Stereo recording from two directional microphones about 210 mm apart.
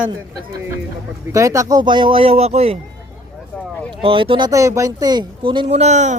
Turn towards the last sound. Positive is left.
turn(degrees=-35)  # may be behind; listen again after turning